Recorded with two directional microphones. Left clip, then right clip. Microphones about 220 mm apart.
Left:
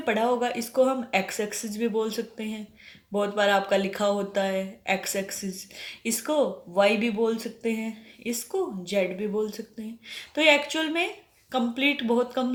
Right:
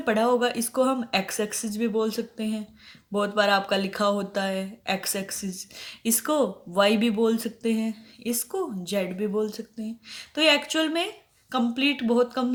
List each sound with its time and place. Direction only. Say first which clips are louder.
0.0 s speech: right 2 dB; 35° right (ahead or behind)